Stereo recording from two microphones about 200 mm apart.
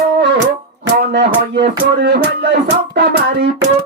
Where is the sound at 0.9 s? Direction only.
55° right (ahead or behind).